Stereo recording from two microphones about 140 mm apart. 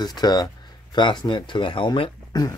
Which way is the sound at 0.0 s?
30° left (ahead or behind).